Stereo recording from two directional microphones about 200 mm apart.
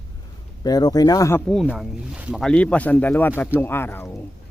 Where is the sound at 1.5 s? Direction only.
Centre (ahead or behind).